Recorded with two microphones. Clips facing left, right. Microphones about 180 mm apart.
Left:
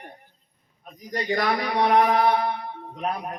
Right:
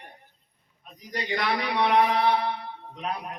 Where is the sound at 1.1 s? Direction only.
45° left (ahead or behind).